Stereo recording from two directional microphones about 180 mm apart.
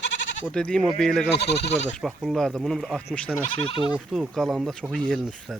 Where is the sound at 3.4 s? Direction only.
35° left (ahead or behind).